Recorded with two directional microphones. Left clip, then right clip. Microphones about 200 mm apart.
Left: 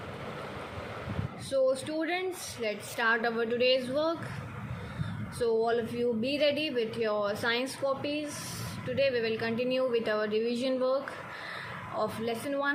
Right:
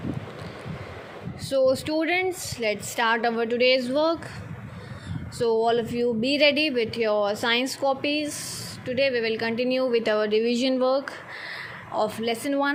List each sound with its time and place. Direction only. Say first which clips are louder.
1.5 s speech: right 6 dB; 35° right (ahead or behind)
5.4 s speech: right 6 dB; 35° right (ahead or behind)